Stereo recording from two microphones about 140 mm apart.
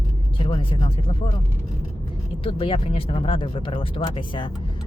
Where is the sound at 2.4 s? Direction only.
40° left (ahead or behind).